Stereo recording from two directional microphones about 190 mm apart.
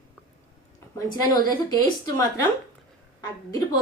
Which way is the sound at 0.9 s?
20° left (ahead or behind).